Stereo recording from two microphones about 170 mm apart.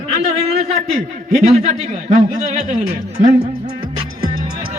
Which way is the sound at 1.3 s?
40° right (ahead or behind).